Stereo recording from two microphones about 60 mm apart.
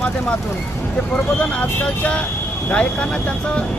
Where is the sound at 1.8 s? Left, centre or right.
Left.